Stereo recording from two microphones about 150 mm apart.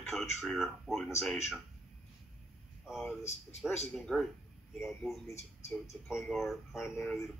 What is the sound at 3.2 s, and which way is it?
Speech, 45° left (ahead or behind).